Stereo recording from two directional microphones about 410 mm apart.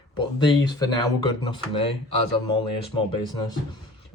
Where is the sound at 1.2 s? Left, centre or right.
Left.